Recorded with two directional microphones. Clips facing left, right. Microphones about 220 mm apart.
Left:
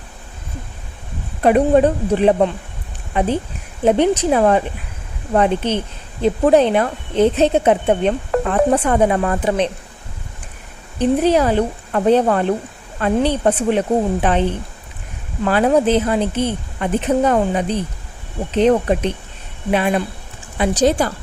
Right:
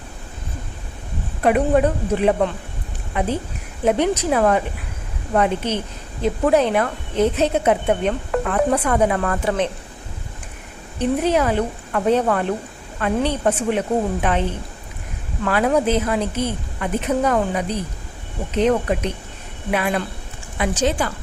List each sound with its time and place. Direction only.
1.5 s a woman's voice: 30° left (ahead or behind)
11.0 s a woman's voice: 35° left (ahead or behind)
15.4 s a woman's voice: 30° left (ahead or behind)
20.6 s a woman's voice: 35° left (ahead or behind)